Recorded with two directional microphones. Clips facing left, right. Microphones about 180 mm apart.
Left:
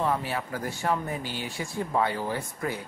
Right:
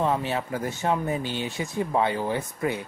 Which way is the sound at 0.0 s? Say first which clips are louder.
Right 3 dB; 20° right (ahead or behind).